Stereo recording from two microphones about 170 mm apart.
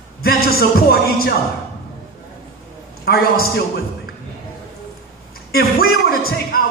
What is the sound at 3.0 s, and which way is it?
Speech, 65° left (ahead or behind).